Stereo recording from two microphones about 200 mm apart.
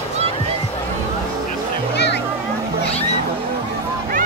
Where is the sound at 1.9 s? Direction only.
60° left (ahead or behind).